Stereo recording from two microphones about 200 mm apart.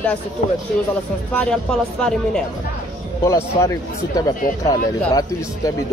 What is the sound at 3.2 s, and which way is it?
Speech, 15° left (ahead or behind).